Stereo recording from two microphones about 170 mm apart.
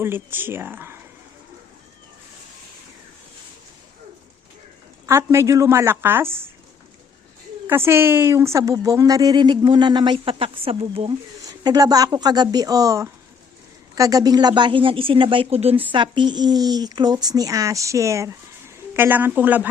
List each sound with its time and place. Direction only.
0.0 s a woman's voice: 15° right (ahead or behind)
5.0 s a woman's voice: 15° right (ahead or behind)
7.7 s speech: 15° right (ahead or behind); by 11.2 s 35° right (ahead or behind)
11.4 s speech: 20° right (ahead or behind)